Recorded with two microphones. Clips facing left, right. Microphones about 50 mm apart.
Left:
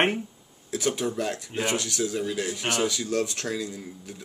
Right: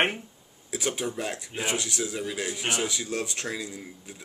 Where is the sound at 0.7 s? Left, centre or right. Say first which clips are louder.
Left 3 dB; right.